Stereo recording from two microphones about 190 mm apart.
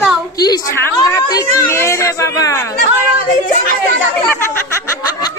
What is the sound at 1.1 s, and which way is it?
Speech, 15° left (ahead or behind).